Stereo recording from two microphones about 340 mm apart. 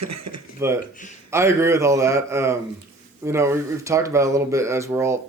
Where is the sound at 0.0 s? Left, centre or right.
Right.